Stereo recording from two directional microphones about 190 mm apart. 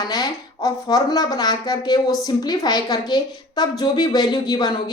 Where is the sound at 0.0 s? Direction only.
20° left (ahead or behind).